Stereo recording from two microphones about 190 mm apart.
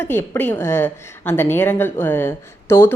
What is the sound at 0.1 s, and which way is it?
A woman's voice, 10° left (ahead or behind).